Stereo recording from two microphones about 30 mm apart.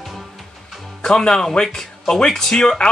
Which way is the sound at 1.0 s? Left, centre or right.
Left.